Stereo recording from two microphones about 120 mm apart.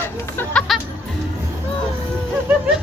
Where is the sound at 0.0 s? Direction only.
20° left (ahead or behind).